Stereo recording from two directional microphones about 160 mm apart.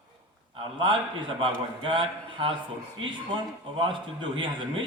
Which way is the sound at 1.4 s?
30° right (ahead or behind).